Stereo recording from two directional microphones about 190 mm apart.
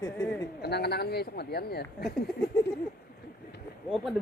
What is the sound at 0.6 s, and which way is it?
Speech, 60° left (ahead or behind).